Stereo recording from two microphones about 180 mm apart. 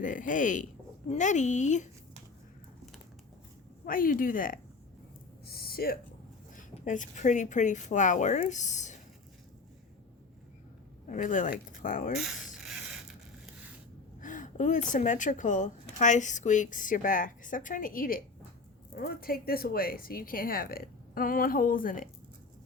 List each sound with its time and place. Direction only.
0.0 s a woman's voice: 45° left (ahead or behind)
3.8 s speech: 50° left (ahead or behind)
5.5 s a sound: 55° left (ahead or behind)
6.6 s speech: 45° left (ahead or behind)
11.0 s speech: 45° left (ahead or behind)
14.2 s speech: 45° left (ahead or behind)